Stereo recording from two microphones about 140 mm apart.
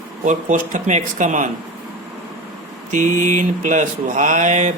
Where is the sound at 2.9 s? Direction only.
65° right (ahead or behind).